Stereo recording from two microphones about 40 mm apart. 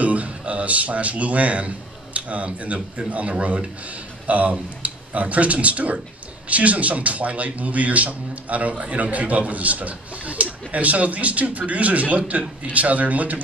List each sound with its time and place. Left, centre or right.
0.0 s a man's voice: right